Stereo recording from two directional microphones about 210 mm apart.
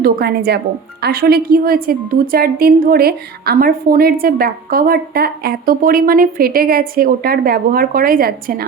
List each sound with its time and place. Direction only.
0.0 s a woman's voice: 50° right (ahead or behind)